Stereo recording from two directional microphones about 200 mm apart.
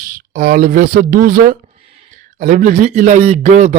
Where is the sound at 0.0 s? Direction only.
45° right (ahead or behind).